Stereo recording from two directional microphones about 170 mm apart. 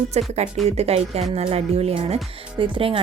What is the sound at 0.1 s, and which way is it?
Speech, 40° right (ahead or behind).